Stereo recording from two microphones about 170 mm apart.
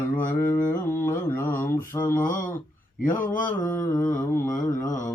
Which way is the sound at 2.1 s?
50° left (ahead or behind).